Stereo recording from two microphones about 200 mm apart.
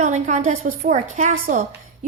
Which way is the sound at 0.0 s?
35° right (ahead or behind).